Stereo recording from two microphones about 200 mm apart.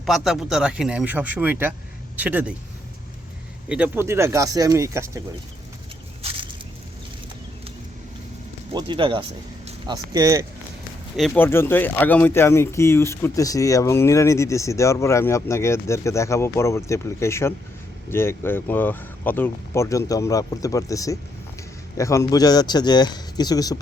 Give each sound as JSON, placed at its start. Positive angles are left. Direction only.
{"t": 0.0, "sound": "speech", "side_deg": 0}
{"t": 3.7, "sound": "speech", "side_deg": -5}
{"t": 8.7, "sound": "speech", "side_deg": -25}
{"t": 11.2, "sound": "a man's voice", "side_deg": 10}